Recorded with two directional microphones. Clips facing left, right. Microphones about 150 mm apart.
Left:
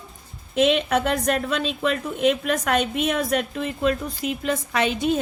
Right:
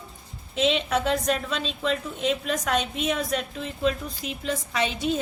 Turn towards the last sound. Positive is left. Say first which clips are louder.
# left 4 dB
turn(degrees=55)  # may be behind; listen again after turning